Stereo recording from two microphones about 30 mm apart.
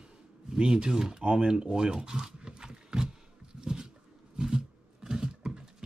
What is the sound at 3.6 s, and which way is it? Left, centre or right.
Dog, right.